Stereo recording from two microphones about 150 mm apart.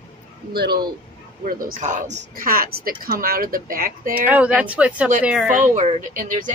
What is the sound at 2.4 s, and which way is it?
Speech, 80° right.